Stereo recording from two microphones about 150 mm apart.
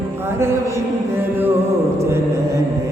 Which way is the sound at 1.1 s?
15° right (ahead or behind).